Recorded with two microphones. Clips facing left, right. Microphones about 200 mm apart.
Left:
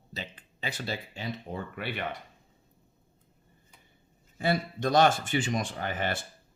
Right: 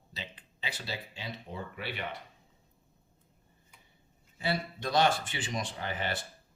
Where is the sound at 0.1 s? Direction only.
45° left (ahead or behind).